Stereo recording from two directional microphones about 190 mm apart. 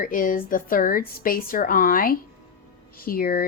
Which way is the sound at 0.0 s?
50° left (ahead or behind).